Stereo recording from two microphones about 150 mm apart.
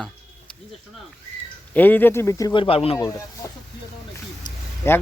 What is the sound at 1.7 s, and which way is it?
Speech, 10° left (ahead or behind).